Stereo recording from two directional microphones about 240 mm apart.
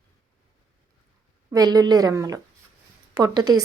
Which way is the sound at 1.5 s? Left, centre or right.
Centre.